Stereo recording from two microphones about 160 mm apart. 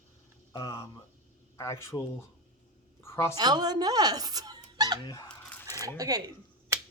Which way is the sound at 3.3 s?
25° right (ahead or behind).